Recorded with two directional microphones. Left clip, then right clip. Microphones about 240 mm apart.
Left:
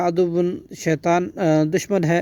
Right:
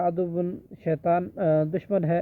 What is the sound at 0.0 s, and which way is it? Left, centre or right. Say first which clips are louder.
Speech: left 6 dB; left.